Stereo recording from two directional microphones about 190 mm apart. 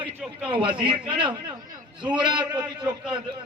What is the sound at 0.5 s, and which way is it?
A man's voice, 25° right (ahead or behind).